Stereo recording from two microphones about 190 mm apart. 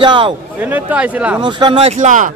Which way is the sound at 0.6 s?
10° right (ahead or behind).